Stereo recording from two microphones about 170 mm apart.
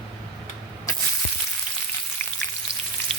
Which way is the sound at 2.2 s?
10° left (ahead or behind).